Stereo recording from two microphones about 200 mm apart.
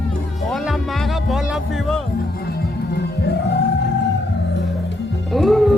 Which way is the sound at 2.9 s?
55° left (ahead or behind).